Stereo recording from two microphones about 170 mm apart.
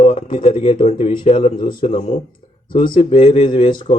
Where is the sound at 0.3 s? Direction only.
35° left (ahead or behind).